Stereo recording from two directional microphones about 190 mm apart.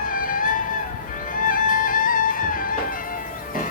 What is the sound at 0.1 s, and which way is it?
Music, 45° left (ahead or behind).